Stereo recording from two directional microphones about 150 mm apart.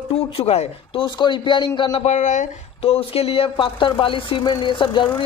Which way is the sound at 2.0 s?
55° left (ahead or behind).